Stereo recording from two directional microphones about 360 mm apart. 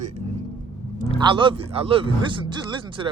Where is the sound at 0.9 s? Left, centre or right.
Centre.